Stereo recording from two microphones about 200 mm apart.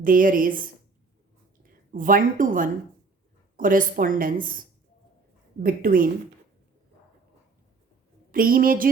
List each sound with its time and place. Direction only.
0.0 s a woman's voice: 45° right (ahead or behind)
1.9 s a woman's voice: 45° right (ahead or behind)
5.6 s a woman's voice: 45° right (ahead or behind)
8.3 s a woman's voice: 45° right (ahead or behind)